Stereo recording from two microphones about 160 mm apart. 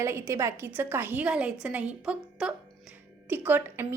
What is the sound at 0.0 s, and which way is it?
A woman's voice, 15° right (ahead or behind).